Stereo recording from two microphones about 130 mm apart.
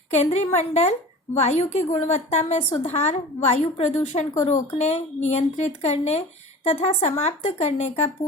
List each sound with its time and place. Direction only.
0.1 s a woman's voice: 60° left (ahead or behind)